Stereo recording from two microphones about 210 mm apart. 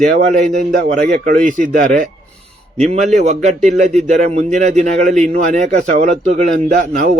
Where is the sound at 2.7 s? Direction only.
30° right (ahead or behind).